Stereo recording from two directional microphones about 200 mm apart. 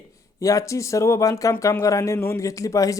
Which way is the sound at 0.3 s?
15° left (ahead or behind).